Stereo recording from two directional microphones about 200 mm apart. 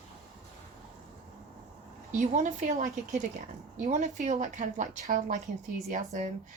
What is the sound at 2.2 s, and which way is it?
Speech, 40° right (ahead or behind).